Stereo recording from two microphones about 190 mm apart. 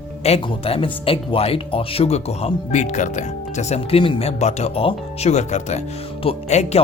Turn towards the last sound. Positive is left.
turn(degrees=35)  # may be behind; listen again after turning